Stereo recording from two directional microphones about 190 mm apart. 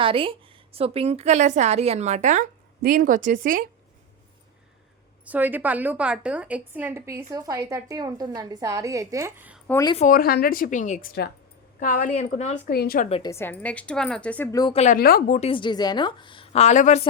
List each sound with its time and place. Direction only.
0.0 s a woman's voice: 30° right (ahead or behind); by 3.7 s 45° right (ahead or behind)
5.2 s a woman's voice: 10° right (ahead or behind)
9.6 s speech: 15° left (ahead or behind)
10.1 s a woman's voice: 50° left (ahead or behind)
12.7 s speech: 55° left (ahead or behind)
13.1 s a woman's voice: 30° left (ahead or behind)
13.3 s a woman's voice: 10° left (ahead or behind)
14.6 s a woman's voice: 35° left (ahead or behind)
14.9 s a woman's voice: 50° left (ahead or behind)
15.4 s a woman's voice: 30° left (ahead or behind)